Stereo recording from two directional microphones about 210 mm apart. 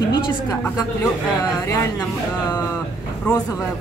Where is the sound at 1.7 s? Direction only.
15° left (ahead or behind).